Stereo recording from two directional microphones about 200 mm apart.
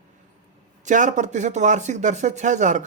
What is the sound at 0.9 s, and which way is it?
Speech, 40° right (ahead or behind).